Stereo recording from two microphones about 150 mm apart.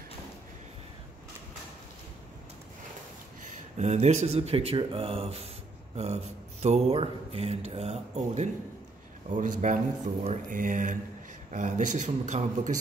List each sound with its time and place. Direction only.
3.4 s speech: 50° right (ahead or behind)
9.3 s speech: 60° right (ahead or behind)